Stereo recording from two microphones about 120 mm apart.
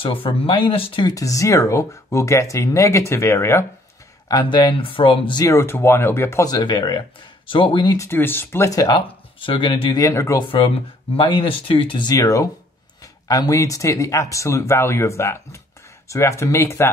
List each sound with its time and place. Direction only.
0.0 s speech: 50° left (ahead or behind)
1.0 s speech: 30° left (ahead or behind)
4.3 s speech: 35° left (ahead or behind)
5.4 s speech: 25° left (ahead or behind)
6.4 s speech: 35° left (ahead or behind)
8.0 s speech: 20° left (ahead or behind)
9.0 s speech: 45° left (ahead or behind)
10.1 s speech: 25° left (ahead or behind)
11.1 s speech: 50° left (ahead or behind); by 16.9 s 20° left (ahead or behind)